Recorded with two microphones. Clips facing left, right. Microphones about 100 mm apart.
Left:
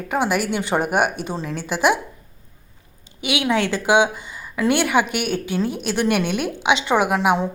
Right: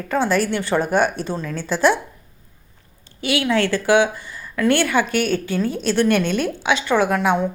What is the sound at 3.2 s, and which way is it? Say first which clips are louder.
A woman's voice: right 1 dB; 15° left (ahead or behind).